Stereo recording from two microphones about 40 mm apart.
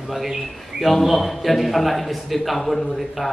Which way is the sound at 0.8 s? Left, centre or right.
Centre.